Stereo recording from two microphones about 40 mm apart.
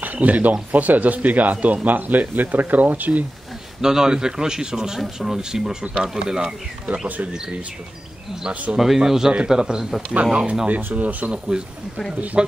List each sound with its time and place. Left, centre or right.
0.0 s speech: right
3.8 s speech: centre
8.7 s speech: centre; by 10.7 s right
10.8 s speech: right
11.3 s speech: centre